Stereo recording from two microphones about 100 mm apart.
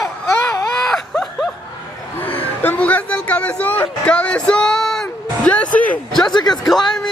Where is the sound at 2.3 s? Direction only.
20° left (ahead or behind).